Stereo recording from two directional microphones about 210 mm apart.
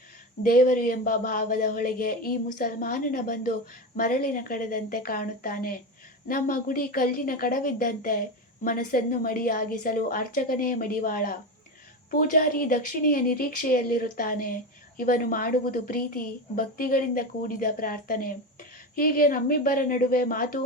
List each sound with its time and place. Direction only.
0.4 s speech: 45° left (ahead or behind)